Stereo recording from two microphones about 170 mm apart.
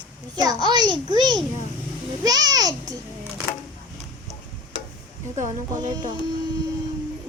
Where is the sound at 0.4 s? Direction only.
25° right (ahead or behind).